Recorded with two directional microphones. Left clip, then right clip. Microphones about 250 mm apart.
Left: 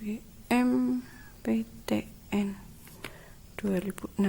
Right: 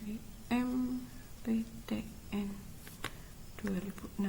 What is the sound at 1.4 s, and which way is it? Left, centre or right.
Speech, left.